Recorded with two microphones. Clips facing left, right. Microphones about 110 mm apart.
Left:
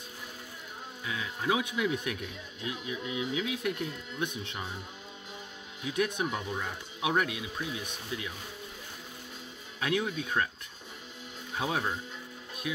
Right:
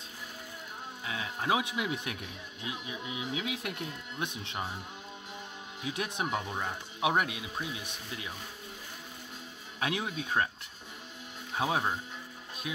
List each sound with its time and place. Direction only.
1.0 s speech: 30° right (ahead or behind)
5.9 s speech: 30° right (ahead or behind)
9.8 s speech: 25° right (ahead or behind)
11.5 s speech: 25° right (ahead or behind)